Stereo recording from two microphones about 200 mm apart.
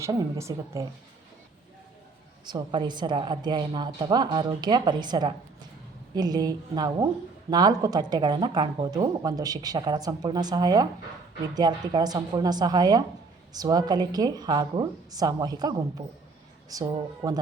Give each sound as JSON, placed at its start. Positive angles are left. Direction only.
{"t": 0.0, "sound": "speech", "side_deg": -15}
{"t": 2.5, "sound": "speech", "side_deg": -20}